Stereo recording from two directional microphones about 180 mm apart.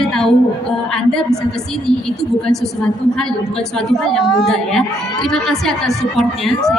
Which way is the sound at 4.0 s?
Centre (ahead or behind).